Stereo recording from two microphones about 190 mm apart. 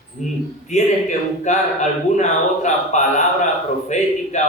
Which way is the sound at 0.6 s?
40° left (ahead or behind).